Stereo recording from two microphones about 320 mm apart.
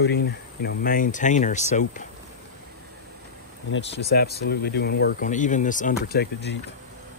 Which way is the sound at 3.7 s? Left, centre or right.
Left.